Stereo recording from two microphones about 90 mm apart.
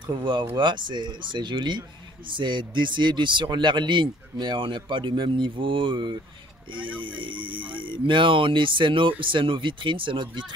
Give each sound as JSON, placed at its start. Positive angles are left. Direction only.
{"t": 0.1, "sound": "speech", "side_deg": -65}